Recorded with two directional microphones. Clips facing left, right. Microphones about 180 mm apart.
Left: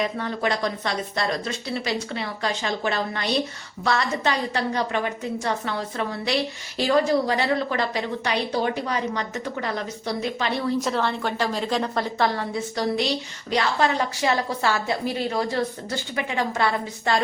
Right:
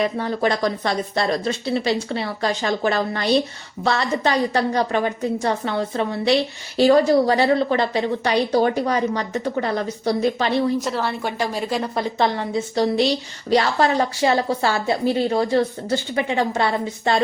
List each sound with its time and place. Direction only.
0.2 s a woman's voice: 35° right (ahead or behind)
5.4 s a woman's voice: 25° right (ahead or behind)
10.8 s a woman's voice: centre (ahead or behind)
12.2 s a woman's voice: 20° right (ahead or behind)
13.5 s a woman's voice: 35° right (ahead or behind)